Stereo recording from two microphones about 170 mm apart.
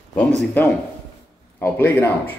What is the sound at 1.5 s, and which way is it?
Speech, 10° left (ahead or behind).